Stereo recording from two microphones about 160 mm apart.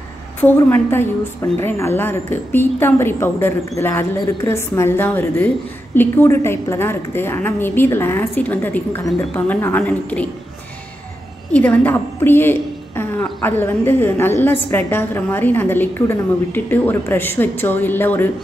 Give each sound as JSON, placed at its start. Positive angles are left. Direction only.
{"t": 0.4, "sound": "a woman's voice", "side_deg": 10}
{"t": 11.5, "sound": "a woman's voice", "side_deg": 10}